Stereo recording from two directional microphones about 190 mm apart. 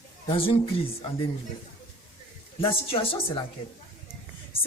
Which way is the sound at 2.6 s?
30° left (ahead or behind).